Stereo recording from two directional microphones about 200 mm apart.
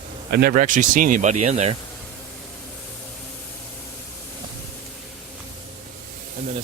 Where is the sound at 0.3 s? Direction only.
50° right (ahead or behind); by 1.7 s 35° right (ahead or behind).